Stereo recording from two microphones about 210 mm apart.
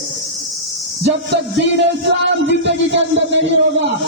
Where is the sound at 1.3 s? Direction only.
55° right (ahead or behind).